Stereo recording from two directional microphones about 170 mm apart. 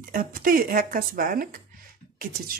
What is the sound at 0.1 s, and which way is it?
Speech, 55° right (ahead or behind).